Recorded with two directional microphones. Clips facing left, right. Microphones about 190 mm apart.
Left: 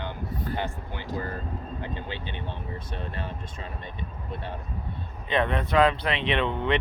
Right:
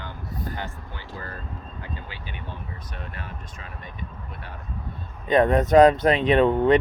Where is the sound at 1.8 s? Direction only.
25° left (ahead or behind).